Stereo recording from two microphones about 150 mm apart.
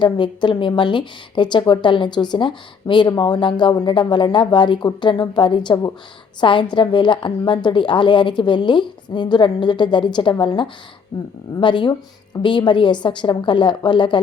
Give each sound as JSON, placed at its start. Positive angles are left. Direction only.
{"t": 0.0, "sound": "a woman's voice", "side_deg": 30}